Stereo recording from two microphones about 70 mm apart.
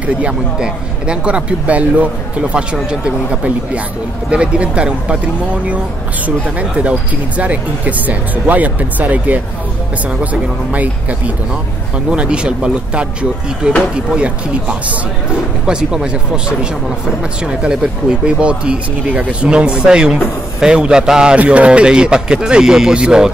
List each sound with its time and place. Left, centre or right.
0.0 s speech: centre
10.7 s speech: right